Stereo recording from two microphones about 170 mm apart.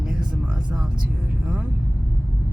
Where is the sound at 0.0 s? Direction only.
5° right (ahead or behind).